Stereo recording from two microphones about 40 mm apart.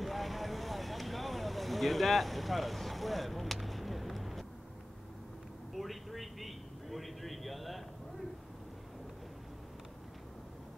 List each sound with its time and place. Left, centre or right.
0.0 s vehicle: centre
5.8 s vehicle: centre